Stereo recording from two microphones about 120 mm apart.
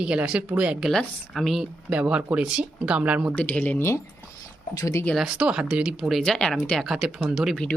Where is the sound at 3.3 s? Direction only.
10° left (ahead or behind); by 5.0 s 25° left (ahead or behind).